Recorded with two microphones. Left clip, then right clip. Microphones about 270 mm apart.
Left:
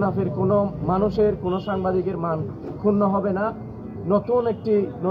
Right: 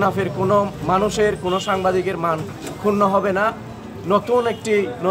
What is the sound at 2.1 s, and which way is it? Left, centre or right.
Speech, centre.